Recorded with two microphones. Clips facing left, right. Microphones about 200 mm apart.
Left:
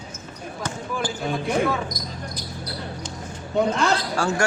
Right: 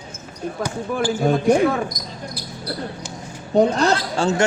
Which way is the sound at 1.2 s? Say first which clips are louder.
Right 7 dB; 50° right (ahead or behind).